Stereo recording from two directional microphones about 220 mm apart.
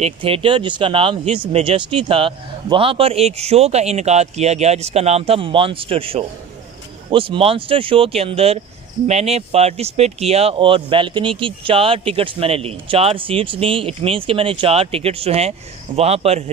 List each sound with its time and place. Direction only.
0.0 s speech: 25° right (ahead or behind)